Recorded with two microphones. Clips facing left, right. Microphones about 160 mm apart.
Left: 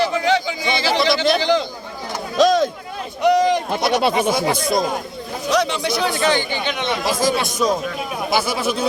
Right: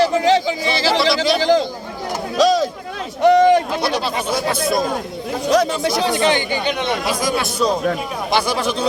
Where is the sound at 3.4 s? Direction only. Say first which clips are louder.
Right 5 dB; 55° right (ahead or behind).